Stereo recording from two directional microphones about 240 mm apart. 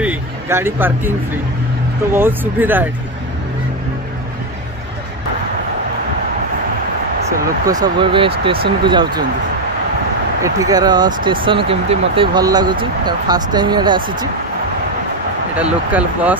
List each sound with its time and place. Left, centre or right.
0.0 s speech: centre
2.1 s speech: centre
7.6 s speech: centre
10.4 s speech: centre
15.5 s speech: centre